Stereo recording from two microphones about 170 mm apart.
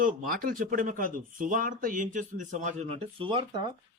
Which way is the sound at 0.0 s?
55° right (ahead or behind).